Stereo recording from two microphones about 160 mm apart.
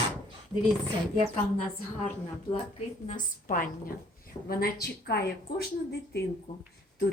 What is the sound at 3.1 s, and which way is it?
A woman's voice, 55° left (ahead or behind).